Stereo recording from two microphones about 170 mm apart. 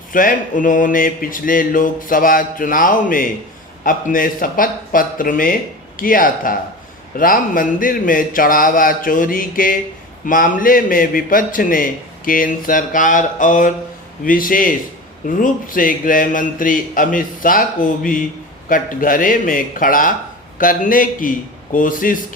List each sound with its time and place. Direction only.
0.1 s a man's voice: 55° left (ahead or behind)